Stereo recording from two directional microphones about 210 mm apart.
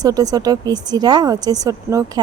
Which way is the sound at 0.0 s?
15° right (ahead or behind).